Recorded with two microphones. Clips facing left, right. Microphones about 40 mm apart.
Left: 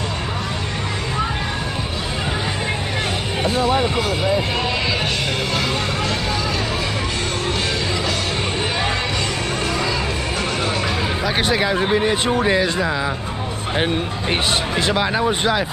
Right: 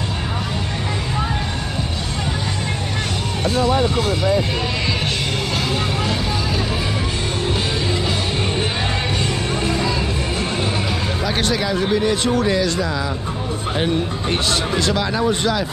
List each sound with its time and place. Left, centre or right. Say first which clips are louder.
3.4 s music: right 1 dB; centre
11.2 s music: left 1 dB; centre
11.5 s speech: left 2 dB; left